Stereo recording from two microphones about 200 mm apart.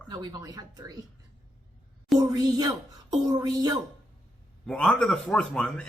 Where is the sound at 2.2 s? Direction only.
20° right (ahead or behind).